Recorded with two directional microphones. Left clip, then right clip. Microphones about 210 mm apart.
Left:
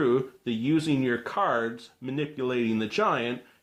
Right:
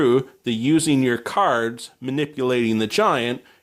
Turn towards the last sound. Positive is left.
turn(degrees=-50)  # may be behind; listen again after turning